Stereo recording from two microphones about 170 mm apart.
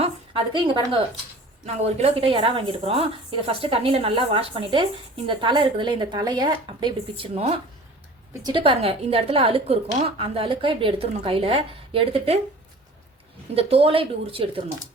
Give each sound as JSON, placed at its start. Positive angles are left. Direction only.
{"t": 0.0, "sound": "a woman's voice", "side_deg": -30}
{"t": 1.6, "sound": "a woman's voice", "side_deg": -40}
{"t": 13.6, "sound": "a woman's voice", "side_deg": -35}